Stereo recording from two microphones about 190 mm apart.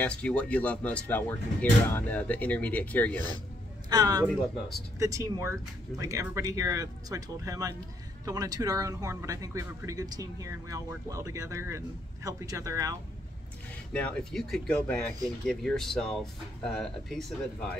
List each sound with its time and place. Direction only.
0.0 s speech: 5° left (ahead or behind)
3.9 s speech: 20° right (ahead or behind)
13.9 s speech: 5° left (ahead or behind)